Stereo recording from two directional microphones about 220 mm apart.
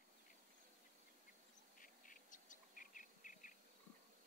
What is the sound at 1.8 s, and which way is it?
Bird, 35° left (ahead or behind).